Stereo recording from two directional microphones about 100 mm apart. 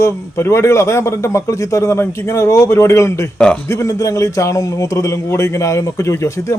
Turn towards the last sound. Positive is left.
turn(degrees=30)  # may be behind; listen again after turning